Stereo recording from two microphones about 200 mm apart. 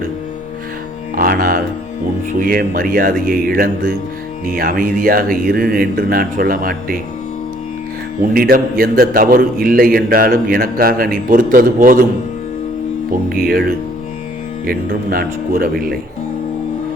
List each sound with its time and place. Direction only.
1.1 s music: 45° right (ahead or behind)
2.4 s a man's voice: 45° right (ahead or behind)
8.2 s a man's voice: 45° right (ahead or behind)
13.3 s a man's voice: 50° right (ahead or behind)